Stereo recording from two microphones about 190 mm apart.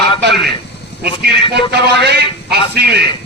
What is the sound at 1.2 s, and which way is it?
A man's voice, 60° right (ahead or behind).